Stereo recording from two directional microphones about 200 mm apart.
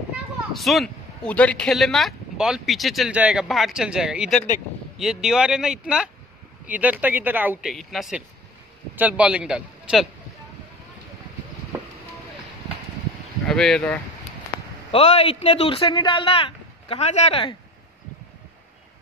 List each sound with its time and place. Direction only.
0.5 s speech: centre (ahead or behind)
13.5 s speech: centre (ahead or behind)
14.9 s a man's voice: 30° left (ahead or behind)